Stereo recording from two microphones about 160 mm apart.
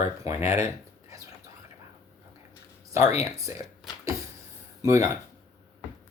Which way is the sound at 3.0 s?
40° left (ahead or behind).